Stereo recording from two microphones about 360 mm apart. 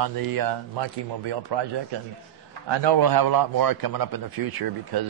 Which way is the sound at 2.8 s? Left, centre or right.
Right.